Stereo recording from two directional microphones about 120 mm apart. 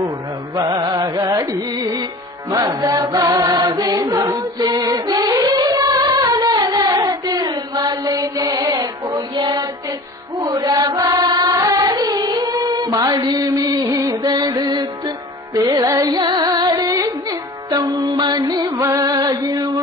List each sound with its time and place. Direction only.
0.6 s music: 35° right (ahead or behind)
2.7 s chant: 30° right (ahead or behind)
8.4 s music: 30° right (ahead or behind)
10.4 s chant: 30° right (ahead or behind)
13.2 s music: 35° right (ahead or behind)
15.5 s music: 25° right (ahead or behind)